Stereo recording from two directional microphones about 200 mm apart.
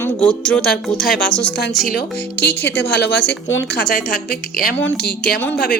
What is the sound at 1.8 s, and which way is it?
A woman's voice, 50° left (ahead or behind).